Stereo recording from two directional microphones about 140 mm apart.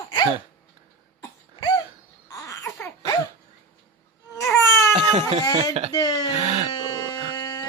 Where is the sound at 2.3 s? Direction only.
20° left (ahead or behind).